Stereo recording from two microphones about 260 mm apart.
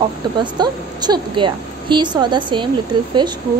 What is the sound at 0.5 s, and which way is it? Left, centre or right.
Speech, centre.